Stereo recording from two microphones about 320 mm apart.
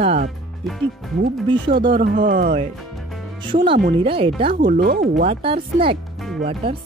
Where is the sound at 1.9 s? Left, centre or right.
Right.